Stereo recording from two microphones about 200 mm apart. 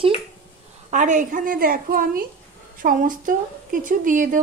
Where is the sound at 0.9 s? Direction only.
40° right (ahead or behind).